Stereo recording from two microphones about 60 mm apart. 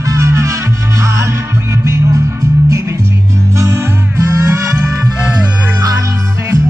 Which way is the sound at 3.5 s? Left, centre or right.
Right.